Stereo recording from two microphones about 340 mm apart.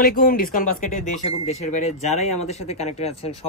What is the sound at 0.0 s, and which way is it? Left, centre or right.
Speech, left.